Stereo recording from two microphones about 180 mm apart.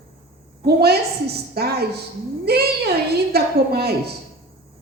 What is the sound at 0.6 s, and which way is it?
Speech, 60° right (ahead or behind).